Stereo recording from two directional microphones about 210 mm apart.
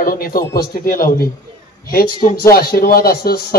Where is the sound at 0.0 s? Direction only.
45° left (ahead or behind).